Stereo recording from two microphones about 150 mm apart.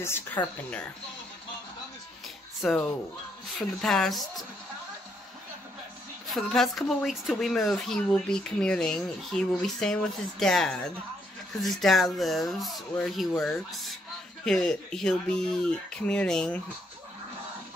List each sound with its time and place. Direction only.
0.0 s speech: 15° left (ahead or behind)
2.6 s speech: centre (ahead or behind)
6.2 s speech: centre (ahead or behind)